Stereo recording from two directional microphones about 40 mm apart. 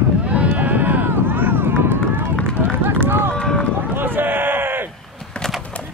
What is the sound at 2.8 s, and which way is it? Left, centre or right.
Run, right.